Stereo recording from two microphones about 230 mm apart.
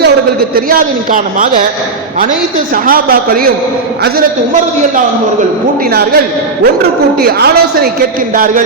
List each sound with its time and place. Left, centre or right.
0.5 s a man's voice: right
2.8 s a man's voice: right
7.2 s a woman's voice: right